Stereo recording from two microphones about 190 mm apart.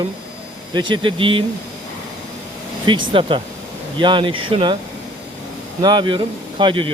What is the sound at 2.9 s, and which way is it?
Speech, 25° right (ahead or behind).